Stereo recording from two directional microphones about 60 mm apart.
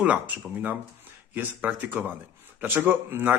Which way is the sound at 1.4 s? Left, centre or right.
Right.